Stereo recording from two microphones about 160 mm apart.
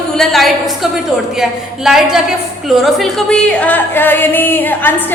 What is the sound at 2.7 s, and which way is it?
Music, centre (ahead or behind).